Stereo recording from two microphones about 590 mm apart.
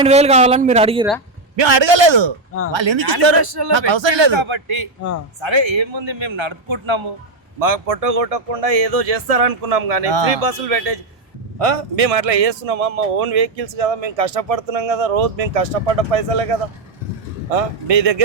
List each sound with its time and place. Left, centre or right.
0.0 s speech: centre
1.5 s a man's voice: right
7.6 s speech: right
10.1 s a man's voice: right
10.3 s a man's voice: right
11.6 s a man's voice: right